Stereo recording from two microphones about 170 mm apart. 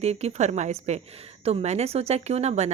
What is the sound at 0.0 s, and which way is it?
Speech, 40° right (ahead or behind).